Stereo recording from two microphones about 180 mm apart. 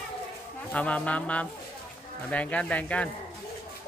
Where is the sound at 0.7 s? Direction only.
5° left (ahead or behind).